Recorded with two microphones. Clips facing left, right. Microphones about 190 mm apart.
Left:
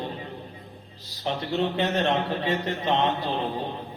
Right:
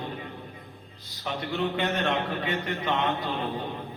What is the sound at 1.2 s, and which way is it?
Speech, 30° left (ahead or behind).